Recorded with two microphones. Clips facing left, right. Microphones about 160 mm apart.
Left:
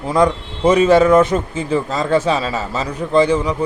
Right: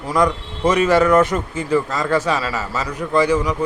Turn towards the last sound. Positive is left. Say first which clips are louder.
# left 3 dB
turn(degrees=30)  # may be behind; listen again after turning